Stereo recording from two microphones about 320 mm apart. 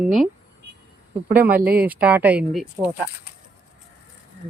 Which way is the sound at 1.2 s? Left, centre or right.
Right.